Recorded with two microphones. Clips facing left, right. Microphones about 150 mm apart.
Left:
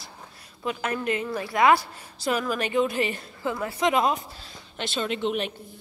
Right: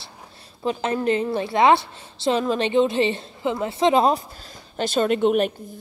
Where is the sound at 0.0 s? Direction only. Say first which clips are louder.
Right 1 dB; 30° right (ahead or behind).